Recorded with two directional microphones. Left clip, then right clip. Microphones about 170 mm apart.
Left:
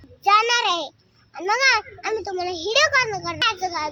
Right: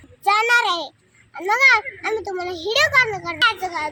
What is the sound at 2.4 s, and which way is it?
Speech, centre (ahead or behind).